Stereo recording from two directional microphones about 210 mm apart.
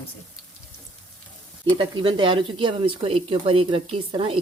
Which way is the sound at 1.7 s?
25° right (ahead or behind).